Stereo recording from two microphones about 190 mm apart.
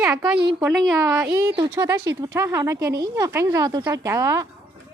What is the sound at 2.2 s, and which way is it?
Speech, 15° right (ahead or behind).